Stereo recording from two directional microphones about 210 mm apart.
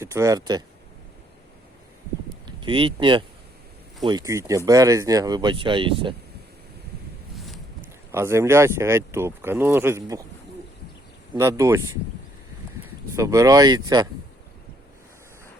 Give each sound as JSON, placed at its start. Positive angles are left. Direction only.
{"t": 0.0, "sound": "speech", "side_deg": -10}
{"t": 2.6, "sound": "speech", "side_deg": -25}
{"t": 7.3, "sound": "a sound", "side_deg": 0}
{"t": 8.1, "sound": "speech", "side_deg": -10}
{"t": 11.3, "sound": "speech", "side_deg": -10}
{"t": 13.1, "sound": "speech", "side_deg": -15}